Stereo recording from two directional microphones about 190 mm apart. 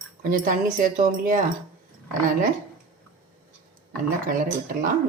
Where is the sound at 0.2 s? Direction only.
45° right (ahead or behind).